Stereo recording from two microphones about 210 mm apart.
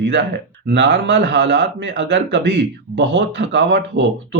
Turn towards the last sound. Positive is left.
turn(degrees=-55)  # may be behind; listen again after turning